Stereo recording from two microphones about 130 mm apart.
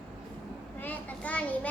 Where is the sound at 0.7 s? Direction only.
15° left (ahead or behind).